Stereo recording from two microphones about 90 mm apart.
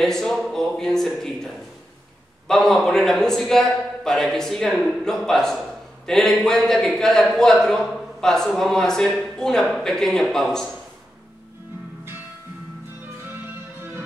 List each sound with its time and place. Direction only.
0.0 s a man's voice: 5° left (ahead or behind)
13.3 s music: 25° right (ahead or behind)